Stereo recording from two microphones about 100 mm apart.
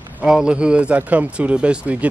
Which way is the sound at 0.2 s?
10° right (ahead or behind).